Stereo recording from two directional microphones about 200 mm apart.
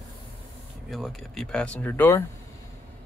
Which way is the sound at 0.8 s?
Centre (ahead or behind).